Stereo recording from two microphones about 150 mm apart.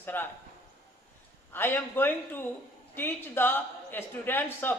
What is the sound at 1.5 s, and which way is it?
A man's voice, 15° left (ahead or behind).